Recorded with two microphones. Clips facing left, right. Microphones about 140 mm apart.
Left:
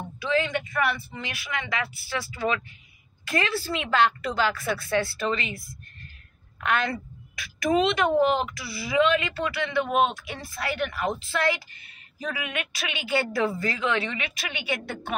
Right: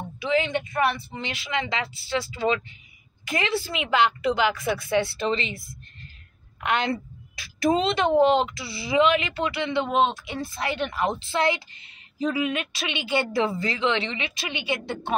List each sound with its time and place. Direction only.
0.2 s a woman's voice: 20° right (ahead or behind)
6.6 s a woman's voice: 20° right (ahead or behind)